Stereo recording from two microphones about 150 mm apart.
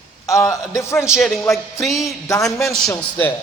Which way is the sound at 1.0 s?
5° right (ahead or behind).